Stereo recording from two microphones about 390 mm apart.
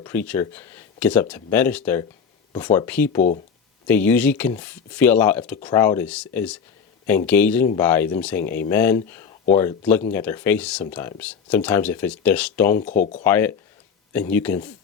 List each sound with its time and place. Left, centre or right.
0.0 s speech: centre
3.2 s speech: centre
3.8 s speech: centre